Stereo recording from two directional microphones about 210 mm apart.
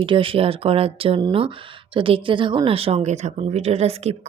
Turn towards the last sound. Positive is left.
turn(degrees=-30)  # may be behind; listen again after turning